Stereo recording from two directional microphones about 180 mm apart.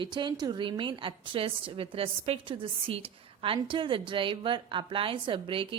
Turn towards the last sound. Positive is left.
turn(degrees=-30)  # may be behind; listen again after turning